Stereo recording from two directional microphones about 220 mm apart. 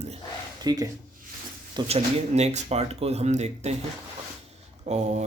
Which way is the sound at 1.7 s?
25° right (ahead or behind).